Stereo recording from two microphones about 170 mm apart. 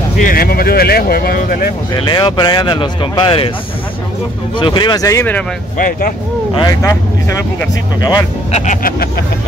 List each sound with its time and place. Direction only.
0.2 s speech: 60° left (ahead or behind)
2.0 s speech: 30° left (ahead or behind)
4.6 s speech: 25° left (ahead or behind)
5.8 s speech: 55° left (ahead or behind)
6.8 s speech: 15° left (ahead or behind)
8.5 s speech: 40° left (ahead or behind)